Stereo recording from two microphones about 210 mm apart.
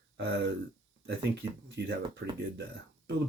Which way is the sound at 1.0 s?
55° right (ahead or behind).